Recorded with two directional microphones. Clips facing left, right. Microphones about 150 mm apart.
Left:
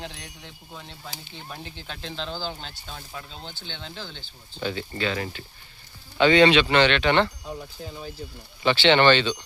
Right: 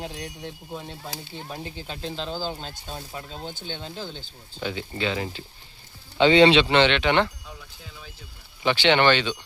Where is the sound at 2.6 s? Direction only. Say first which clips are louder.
Right 3 dB; 40° right (ahead or behind).